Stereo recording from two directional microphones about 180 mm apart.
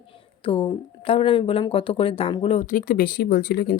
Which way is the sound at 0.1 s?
30° left (ahead or behind).